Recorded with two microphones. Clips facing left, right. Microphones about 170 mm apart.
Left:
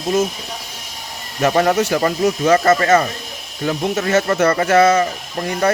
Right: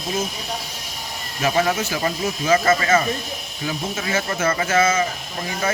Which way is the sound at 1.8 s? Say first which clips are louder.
Left 8 dB; 70° left (ahead or behind).